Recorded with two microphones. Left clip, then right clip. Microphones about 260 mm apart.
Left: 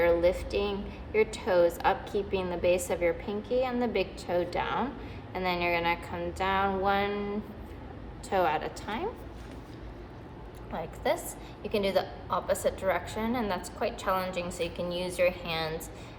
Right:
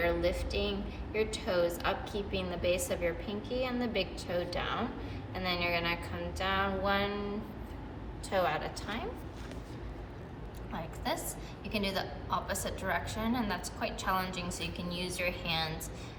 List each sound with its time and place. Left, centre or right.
0.0 s a woman's voice: left
8.3 s a woman's voice: left
10.7 s a woman's voice: left